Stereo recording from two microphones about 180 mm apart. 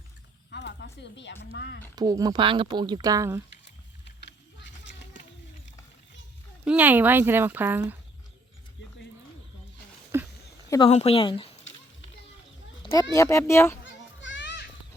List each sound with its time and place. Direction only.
0.5 s speech: 75° left (ahead or behind)
2.0 s speech: 20° right (ahead or behind)
4.0 s a sound: 75° left (ahead or behind)
6.7 s speech: 10° right (ahead or behind)
10.1 s a sound: 15° right (ahead or behind)
10.7 s speech: 25° left (ahead or behind)
13.1 s speech: 15° left (ahead or behind)
13.8 s children playing: 90° left